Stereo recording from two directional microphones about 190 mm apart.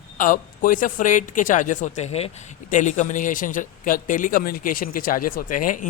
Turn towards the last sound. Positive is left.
turn(degrees=45)  # may be behind; listen again after turning